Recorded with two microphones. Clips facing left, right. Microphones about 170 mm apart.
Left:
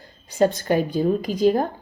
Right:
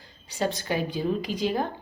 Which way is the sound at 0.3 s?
50° left (ahead or behind).